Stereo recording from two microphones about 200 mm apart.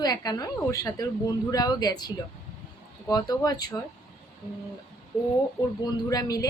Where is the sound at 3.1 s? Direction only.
20° left (ahead or behind).